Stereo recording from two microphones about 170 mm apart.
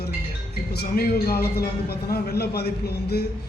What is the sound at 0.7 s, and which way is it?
Speech, 70° left (ahead or behind).